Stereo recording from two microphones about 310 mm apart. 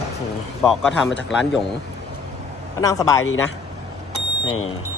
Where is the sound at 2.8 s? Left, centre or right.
Centre.